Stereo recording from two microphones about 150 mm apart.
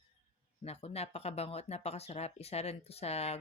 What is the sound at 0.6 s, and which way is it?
Speech, 45° left (ahead or behind).